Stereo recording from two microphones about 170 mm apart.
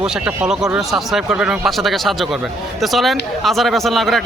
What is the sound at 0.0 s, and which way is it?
Speech, 5° right (ahead or behind).